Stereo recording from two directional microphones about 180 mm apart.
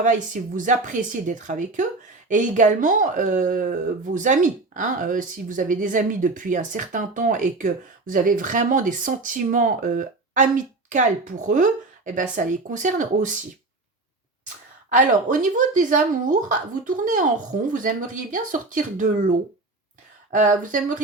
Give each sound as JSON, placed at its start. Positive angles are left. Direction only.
{"t": 0.0, "sound": "speech", "side_deg": -45}
{"t": 14.8, "sound": "speech", "side_deg": -45}
{"t": 20.3, "sound": "speech", "side_deg": -45}